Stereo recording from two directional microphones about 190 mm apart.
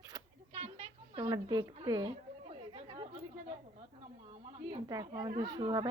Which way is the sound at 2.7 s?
20° right (ahead or behind).